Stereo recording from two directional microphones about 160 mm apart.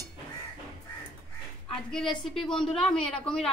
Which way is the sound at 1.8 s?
Centre (ahead or behind).